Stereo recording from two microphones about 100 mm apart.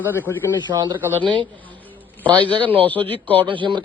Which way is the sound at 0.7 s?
50° right (ahead or behind).